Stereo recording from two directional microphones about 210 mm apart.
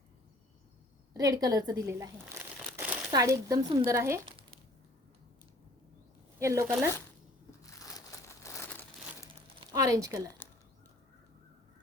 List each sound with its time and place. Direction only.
1.1 s speech: 15° right (ahead or behind)
2.7 s crumpling: 10° right (ahead or behind)
3.1 s a woman's voice: 15° right (ahead or behind)
6.4 s a woman's voice: 15° right (ahead or behind)
7.6 s crumpling: 15° left (ahead or behind)
9.6 s speech: 15° right (ahead or behind)